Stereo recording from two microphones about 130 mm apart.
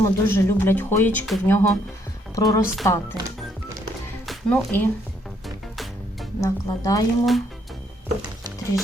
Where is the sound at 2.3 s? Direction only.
25° left (ahead or behind).